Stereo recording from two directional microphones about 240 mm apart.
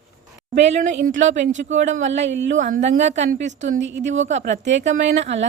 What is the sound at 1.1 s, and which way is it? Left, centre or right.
Speech, right.